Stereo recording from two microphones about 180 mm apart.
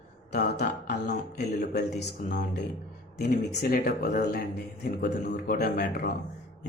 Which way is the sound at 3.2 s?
60° left (ahead or behind).